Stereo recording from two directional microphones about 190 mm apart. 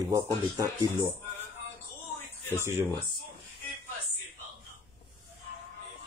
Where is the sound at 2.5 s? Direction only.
10° right (ahead or behind).